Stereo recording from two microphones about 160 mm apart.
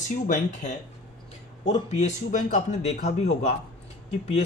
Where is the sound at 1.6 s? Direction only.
45° left (ahead or behind).